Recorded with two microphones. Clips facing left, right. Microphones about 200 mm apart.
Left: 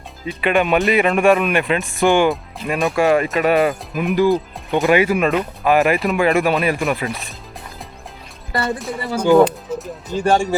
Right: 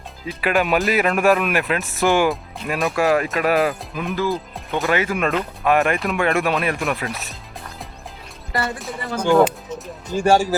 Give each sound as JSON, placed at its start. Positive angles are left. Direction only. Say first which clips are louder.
{"t": 0.3, "sound": "speech", "louder": "left 3 dB", "side_deg": 0}
{"t": 3.9, "sound": "speech", "louder": "left 7 dB", "side_deg": 10}
{"t": 8.8, "sound": "speech", "louder": "left 4 dB", "side_deg": 5}